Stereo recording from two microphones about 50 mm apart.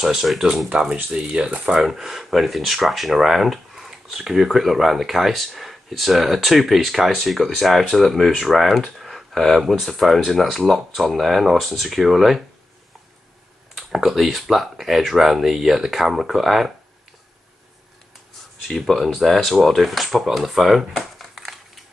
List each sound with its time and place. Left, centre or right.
0.0 s speech: centre; by 1.8 s right
1.8 s speech: centre
13.7 s speech: centre
18.7 s speech: centre
20.9 s shuffling cards: centre